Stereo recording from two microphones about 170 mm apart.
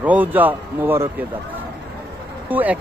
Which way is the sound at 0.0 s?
10° right (ahead or behind).